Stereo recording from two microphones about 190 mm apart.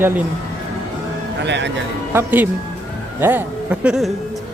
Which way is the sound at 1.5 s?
70° right (ahead or behind).